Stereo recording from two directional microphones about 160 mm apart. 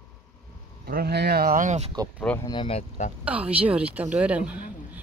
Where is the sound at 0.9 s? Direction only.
75° right (ahead or behind); by 1.9 s 50° right (ahead or behind).